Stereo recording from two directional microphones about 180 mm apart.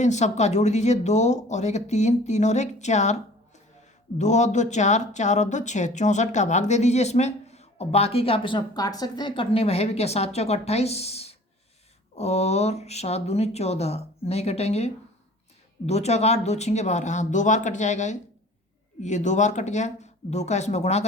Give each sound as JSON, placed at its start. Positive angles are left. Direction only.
{"t": 0.0, "sound": "speech", "side_deg": 40}